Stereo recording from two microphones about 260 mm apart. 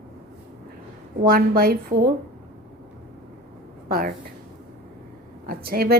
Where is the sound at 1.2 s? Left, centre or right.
Right.